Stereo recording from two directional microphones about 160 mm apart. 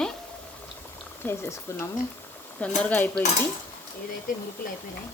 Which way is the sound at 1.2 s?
15° left (ahead or behind).